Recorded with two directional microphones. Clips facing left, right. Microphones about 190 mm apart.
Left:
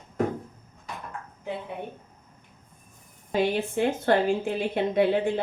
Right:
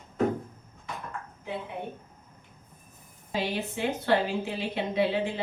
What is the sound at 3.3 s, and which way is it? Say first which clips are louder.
Speech: left 6 dB; 50° left (ahead or behind).